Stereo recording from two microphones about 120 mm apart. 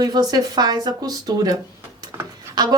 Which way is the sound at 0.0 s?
35° right (ahead or behind).